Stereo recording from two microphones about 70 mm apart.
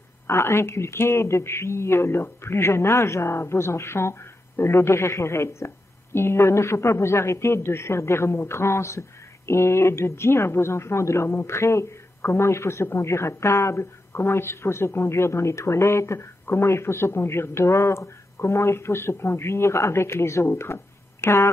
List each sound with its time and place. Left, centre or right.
0.3 s speech: left